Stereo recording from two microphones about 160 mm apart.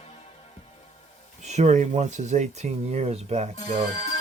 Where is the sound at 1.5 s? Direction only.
45° right (ahead or behind).